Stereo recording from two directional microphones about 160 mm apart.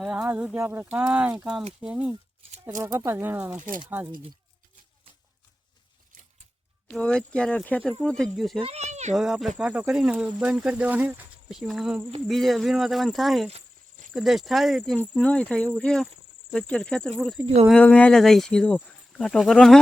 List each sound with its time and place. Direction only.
0.0 s speech: 5° right (ahead or behind)
2.6 s speech: 15° right (ahead or behind)
6.8 s speech: 5° left (ahead or behind)
8.6 s speech: 45° right (ahead or behind)
9.1 s speech: centre (ahead or behind)
17.2 s speech: 5° right (ahead or behind)
17.4 s speech: 35° right (ahead or behind)
17.7 s speech: 5° left (ahead or behind)